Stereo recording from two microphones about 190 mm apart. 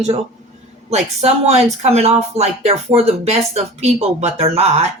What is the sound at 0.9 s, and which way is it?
Speech, 35° right (ahead or behind).